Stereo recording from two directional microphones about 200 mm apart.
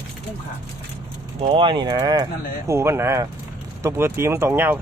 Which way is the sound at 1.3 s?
25° right (ahead or behind).